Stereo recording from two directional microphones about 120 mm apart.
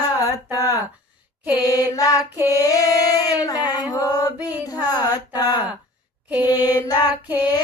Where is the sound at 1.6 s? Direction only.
30° left (ahead or behind).